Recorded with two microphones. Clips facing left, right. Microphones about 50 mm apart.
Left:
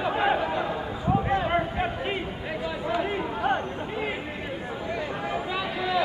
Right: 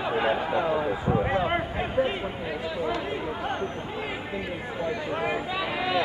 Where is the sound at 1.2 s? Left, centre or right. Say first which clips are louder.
Left 1 dB; centre.